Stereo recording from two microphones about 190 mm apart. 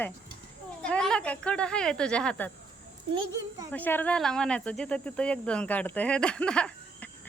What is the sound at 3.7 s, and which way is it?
Speech, 10° left (ahead or behind).